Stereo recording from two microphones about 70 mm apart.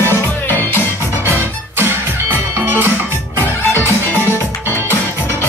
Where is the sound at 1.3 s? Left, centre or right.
Right.